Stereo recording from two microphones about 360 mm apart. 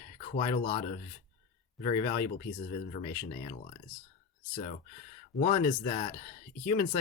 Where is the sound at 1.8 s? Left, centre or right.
Centre.